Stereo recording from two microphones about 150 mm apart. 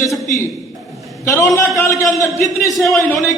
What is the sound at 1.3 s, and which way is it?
A man's voice, 20° left (ahead or behind).